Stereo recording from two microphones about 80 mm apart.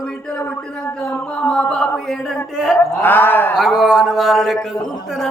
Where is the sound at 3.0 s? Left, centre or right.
Left.